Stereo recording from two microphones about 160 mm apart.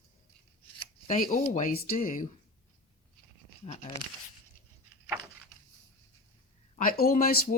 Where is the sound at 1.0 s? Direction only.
55° left (ahead or behind).